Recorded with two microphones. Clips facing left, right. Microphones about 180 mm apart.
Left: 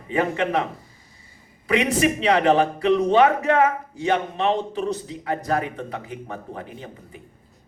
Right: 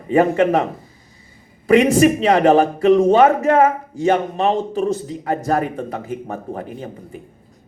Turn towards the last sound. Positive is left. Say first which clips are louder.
# right 7 dB
turn(degrees=-45)  # may be behind; listen again after turning